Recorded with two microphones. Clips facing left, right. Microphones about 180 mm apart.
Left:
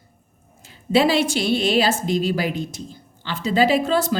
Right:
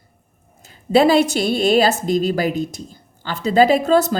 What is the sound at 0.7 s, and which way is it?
A woman's voice, 45° right (ahead or behind).